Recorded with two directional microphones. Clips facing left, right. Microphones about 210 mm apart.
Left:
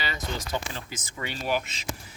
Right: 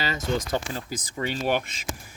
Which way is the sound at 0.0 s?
40° right (ahead or behind).